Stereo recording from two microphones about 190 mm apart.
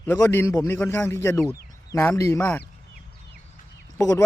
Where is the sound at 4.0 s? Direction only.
15° left (ahead or behind).